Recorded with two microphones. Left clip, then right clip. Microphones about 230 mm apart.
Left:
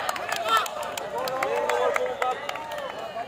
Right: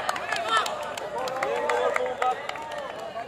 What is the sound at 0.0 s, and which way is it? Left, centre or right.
Run, left.